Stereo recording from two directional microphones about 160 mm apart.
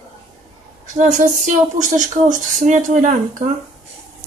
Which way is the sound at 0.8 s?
50° right (ahead or behind).